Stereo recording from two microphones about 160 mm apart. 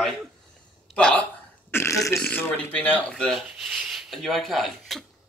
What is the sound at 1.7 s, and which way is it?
Burping, 15° left (ahead or behind).